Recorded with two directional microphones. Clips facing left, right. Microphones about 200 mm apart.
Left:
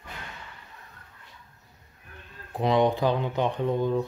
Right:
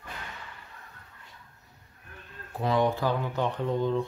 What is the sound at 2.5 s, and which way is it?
Speech, 15° left (ahead or behind).